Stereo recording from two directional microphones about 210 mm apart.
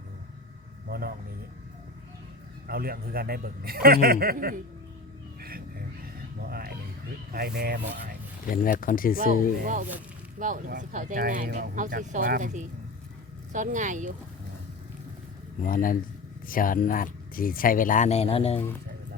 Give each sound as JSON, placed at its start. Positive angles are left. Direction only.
{"t": 0.9, "sound": "a man's voice", "side_deg": -45}
{"t": 2.6, "sound": "a man's voice", "side_deg": -45}
{"t": 5.4, "sound": "music", "side_deg": -45}
{"t": 6.4, "sound": "a sound", "side_deg": -45}
{"t": 7.3, "sound": "a man's voice", "side_deg": -50}
{"t": 8.4, "sound": "speech", "side_deg": 40}
{"t": 10.3, "sound": "speech", "side_deg": -40}
{"t": 15.6, "sound": "speech", "side_deg": 40}